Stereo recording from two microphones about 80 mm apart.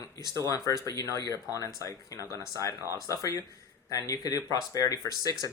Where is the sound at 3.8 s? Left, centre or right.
Left.